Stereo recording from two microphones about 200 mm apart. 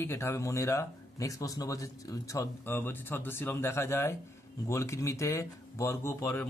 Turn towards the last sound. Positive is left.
turn(degrees=10)  # may be behind; listen again after turning